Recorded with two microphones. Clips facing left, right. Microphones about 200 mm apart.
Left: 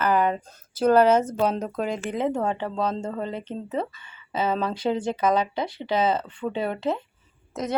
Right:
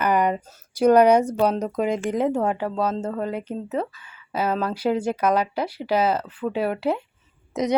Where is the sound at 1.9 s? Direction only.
10° right (ahead or behind).